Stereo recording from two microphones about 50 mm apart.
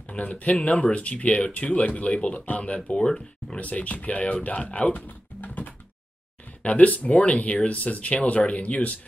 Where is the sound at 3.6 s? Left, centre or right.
Left.